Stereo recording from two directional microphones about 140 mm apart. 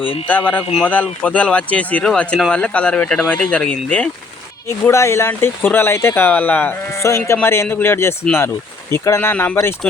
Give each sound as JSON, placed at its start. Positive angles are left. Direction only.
{"t": 0.0, "sound": "speech", "side_deg": 40}
{"t": 0.3, "sound": "speech", "side_deg": 10}
{"t": 4.8, "sound": "speech", "side_deg": 20}